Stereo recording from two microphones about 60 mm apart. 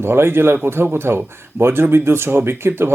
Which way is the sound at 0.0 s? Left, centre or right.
Right.